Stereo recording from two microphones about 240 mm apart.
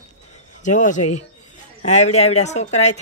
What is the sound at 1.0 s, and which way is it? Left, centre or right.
Speech, left.